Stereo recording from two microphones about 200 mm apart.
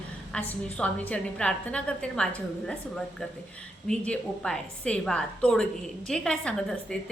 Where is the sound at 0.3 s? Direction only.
5° left (ahead or behind).